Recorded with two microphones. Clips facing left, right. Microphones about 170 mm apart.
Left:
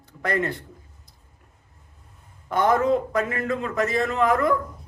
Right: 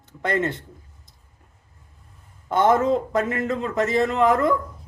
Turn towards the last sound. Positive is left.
turn(degrees=-20)  # may be behind; listen again after turning